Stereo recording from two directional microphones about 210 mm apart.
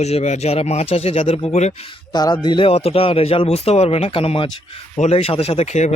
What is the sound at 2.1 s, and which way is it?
A man's voice, 20° left (ahead or behind).